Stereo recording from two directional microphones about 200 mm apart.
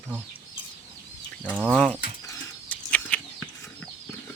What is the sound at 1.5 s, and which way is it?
Speech, 5° right (ahead or behind).